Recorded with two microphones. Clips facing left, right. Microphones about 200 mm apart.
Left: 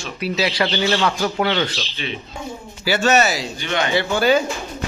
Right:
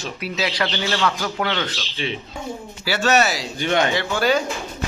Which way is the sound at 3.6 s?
50° right (ahead or behind).